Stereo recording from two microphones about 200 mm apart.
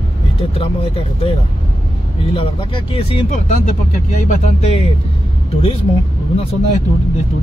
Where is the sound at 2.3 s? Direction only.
25° left (ahead or behind).